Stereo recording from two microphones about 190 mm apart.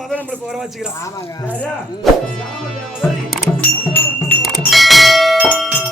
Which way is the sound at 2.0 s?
Centre (ahead or behind).